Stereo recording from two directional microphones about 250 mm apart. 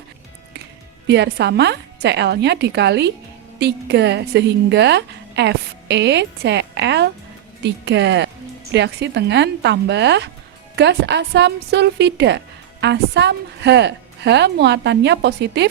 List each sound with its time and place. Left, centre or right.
1.0 s a woman's voice: right